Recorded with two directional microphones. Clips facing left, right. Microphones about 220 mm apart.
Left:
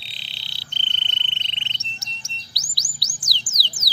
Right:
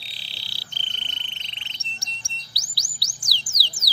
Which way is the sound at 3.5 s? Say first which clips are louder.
Left 1 dB; 20° left (ahead or behind).